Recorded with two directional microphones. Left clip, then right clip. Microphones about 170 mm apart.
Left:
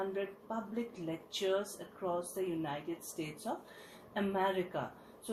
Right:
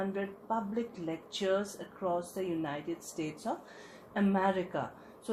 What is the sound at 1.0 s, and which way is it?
Speech, 35° right (ahead or behind).